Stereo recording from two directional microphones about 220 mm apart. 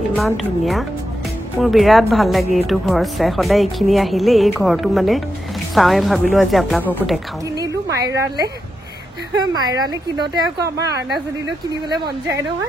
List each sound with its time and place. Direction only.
0.1 s a woman's voice: centre (ahead or behind)
7.5 s a sound: 15° right (ahead or behind)
9.4 s speech: 20° right (ahead or behind)
11.7 s speech: 20° right (ahead or behind)